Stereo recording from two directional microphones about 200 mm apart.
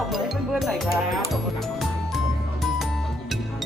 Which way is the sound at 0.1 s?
Centre (ahead or behind).